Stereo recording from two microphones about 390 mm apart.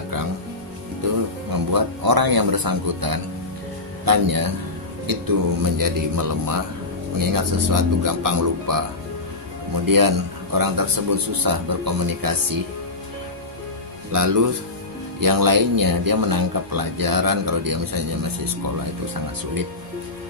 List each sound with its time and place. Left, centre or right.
1.5 s speech: right
9.8 s speech: right
14.1 s speech: right